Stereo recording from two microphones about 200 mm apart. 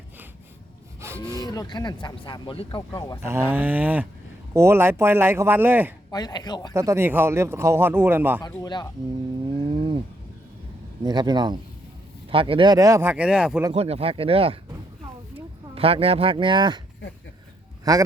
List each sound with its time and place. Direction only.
1.0 s a sound: 15° right (ahead or behind)
1.4 s speech: 20° left (ahead or behind)
3.2 s speech: 10° right (ahead or behind)
6.1 s speech: 20° left (ahead or behind)
6.7 s speech: 15° right (ahead or behind)
8.4 s speech: 20° left (ahead or behind)
9.6 s a sound: 25° right (ahead or behind)
11.0 s speech: 20° right (ahead or behind); by 13.7 s 5° right (ahead or behind)
13.7 s speech: 30° right (ahead or behind)
15.7 s speech: 30° right (ahead or behind)
17.9 s speech: 20° right (ahead or behind)